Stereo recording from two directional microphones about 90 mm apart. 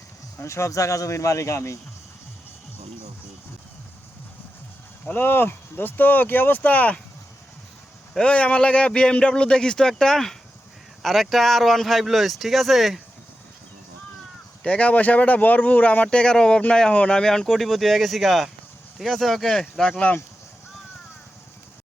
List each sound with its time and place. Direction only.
0.3 s speech: 35° left (ahead or behind)
5.0 s speech: 25° left (ahead or behind)
8.1 s speech: 10° left (ahead or behind)
14.6 s speech: 15° left (ahead or behind)